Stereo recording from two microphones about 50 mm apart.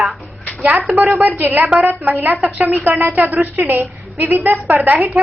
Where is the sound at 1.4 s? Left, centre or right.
Right.